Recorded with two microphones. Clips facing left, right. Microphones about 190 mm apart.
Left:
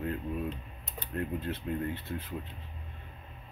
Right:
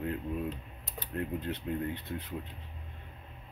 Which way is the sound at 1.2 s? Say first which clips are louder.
Left 1 dB; 15° right (ahead or behind).